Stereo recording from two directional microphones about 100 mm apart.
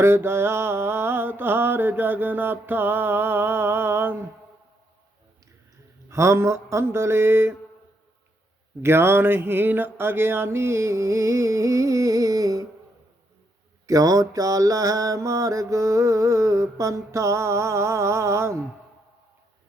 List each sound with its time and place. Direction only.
0.0 s mantra: 25° right (ahead or behind)
6.1 s mantra: 30° right (ahead or behind)
8.8 s mantra: 25° right (ahead or behind)
13.8 s mantra: 35° right (ahead or behind)